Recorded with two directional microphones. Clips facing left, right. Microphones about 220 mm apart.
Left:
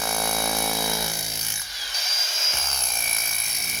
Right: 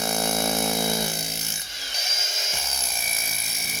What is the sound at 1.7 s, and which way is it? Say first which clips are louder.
Tools: right 2 dB; 25° right (ahead or behind).